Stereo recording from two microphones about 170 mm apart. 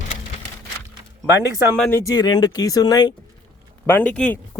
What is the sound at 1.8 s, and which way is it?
Speech, 15° left (ahead or behind).